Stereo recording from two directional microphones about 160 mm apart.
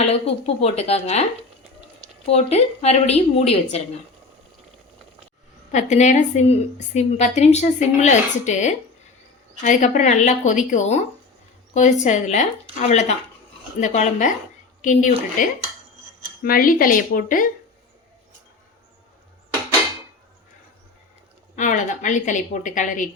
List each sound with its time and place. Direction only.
0.1 s a woman's voice: 40° left (ahead or behind)
2.2 s a woman's voice: 40° left (ahead or behind)
5.7 s a woman's voice: 50° left (ahead or behind)
16.4 s speech: 65° left (ahead or behind)
21.5 s a woman's voice: 50° left (ahead or behind)